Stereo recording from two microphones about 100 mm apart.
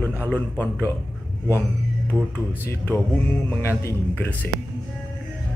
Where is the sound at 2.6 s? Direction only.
20° left (ahead or behind).